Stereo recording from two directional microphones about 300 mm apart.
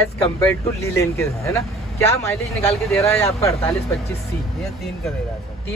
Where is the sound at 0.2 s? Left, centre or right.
Centre.